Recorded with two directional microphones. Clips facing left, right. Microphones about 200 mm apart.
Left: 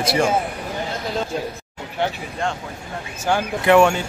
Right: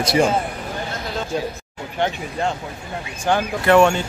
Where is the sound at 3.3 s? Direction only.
10° left (ahead or behind).